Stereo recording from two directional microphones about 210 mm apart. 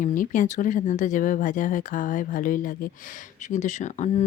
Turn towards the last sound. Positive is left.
turn(degrees=35)  # may be behind; listen again after turning